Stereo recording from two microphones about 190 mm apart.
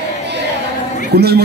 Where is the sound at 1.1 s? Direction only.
55° right (ahead or behind).